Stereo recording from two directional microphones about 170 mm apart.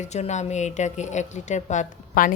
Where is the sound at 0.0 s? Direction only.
40° left (ahead or behind).